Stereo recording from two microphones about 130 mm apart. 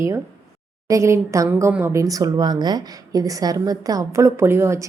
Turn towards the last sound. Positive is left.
turn(degrees=-20)  # may be behind; listen again after turning